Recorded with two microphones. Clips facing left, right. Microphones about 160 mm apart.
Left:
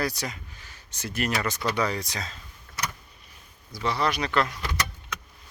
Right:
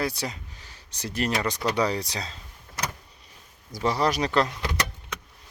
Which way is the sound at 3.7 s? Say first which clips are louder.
Right 2 dB; 40° right (ahead or behind).